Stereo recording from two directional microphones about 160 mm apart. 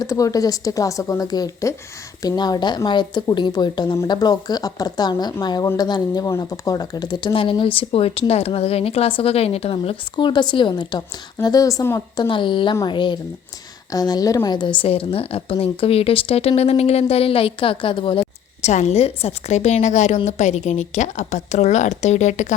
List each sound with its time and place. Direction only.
0.0 s speech: 20° left (ahead or behind)
18.7 s a woman's voice: 45° left (ahead or behind)